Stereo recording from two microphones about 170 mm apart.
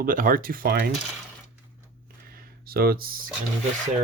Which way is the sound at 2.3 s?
65° right (ahead or behind).